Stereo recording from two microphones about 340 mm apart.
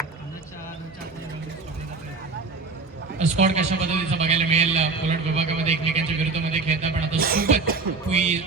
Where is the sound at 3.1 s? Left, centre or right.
Centre.